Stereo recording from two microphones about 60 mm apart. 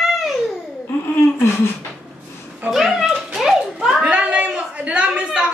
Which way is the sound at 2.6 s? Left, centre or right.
Centre.